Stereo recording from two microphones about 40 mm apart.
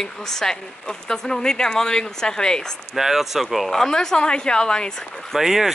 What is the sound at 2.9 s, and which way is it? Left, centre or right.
Speech, centre.